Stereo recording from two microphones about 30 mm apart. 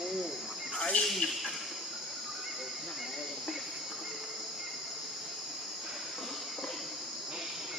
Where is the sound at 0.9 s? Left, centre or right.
Left.